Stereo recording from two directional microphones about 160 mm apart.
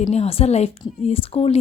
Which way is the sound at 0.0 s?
40° left (ahead or behind).